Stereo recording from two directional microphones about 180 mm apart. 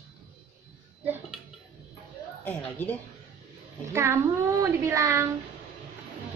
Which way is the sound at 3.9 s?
15° right (ahead or behind).